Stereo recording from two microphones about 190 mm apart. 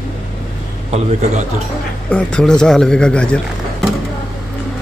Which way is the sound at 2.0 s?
5° left (ahead or behind).